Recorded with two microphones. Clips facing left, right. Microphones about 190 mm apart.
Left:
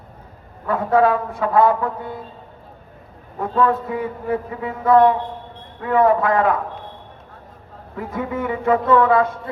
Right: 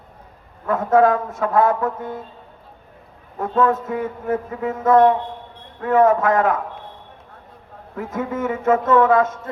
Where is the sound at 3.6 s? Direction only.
45° right (ahead or behind).